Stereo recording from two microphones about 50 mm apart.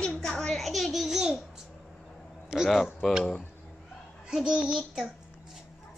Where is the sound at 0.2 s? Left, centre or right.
Centre.